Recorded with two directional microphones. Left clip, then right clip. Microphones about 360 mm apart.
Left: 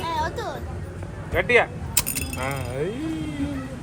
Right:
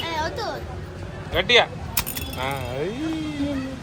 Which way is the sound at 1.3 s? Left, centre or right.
Centre.